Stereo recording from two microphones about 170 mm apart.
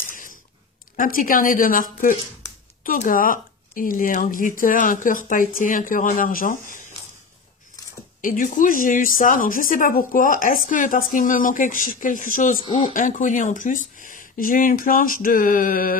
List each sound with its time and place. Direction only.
0.1 s a sound: 55° left (ahead or behind)
0.9 s speech: 55° left (ahead or behind)
8.2 s speech: 50° left (ahead or behind)
12.6 s speech: 30° left (ahead or behind)
12.9 s speech: 50° left (ahead or behind)